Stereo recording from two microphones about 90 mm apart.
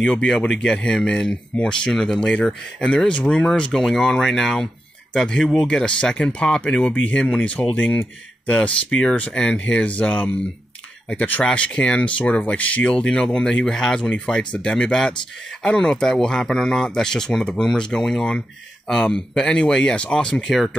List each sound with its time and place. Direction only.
0.0 s speech: 10° left (ahead or behind)